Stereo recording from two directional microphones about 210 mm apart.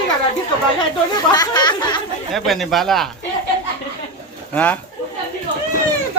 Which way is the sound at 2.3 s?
Centre (ahead or behind).